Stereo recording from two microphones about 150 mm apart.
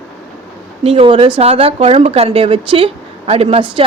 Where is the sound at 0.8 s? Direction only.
40° right (ahead or behind).